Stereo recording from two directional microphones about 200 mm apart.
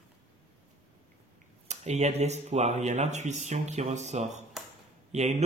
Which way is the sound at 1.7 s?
35° right (ahead or behind).